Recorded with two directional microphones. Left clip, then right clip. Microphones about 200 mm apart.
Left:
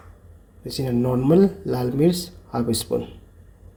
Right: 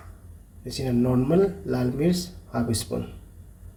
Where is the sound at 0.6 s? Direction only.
40° left (ahead or behind).